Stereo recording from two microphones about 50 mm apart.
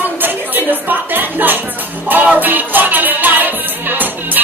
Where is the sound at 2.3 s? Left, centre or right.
Right.